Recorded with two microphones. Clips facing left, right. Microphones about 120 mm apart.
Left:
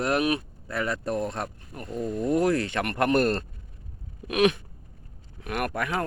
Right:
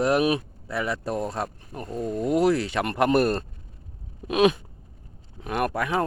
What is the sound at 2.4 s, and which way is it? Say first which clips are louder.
Speech: right 2 dB; 10° right (ahead or behind).